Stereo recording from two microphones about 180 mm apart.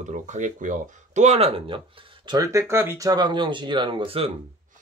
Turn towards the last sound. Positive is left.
turn(degrees=-30)  # may be behind; listen again after turning